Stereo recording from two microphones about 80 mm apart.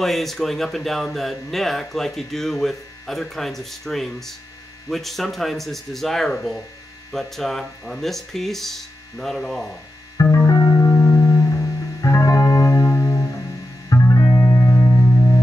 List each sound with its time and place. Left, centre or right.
0.0 s speech: centre
10.3 s music: left; by 15.3 s centre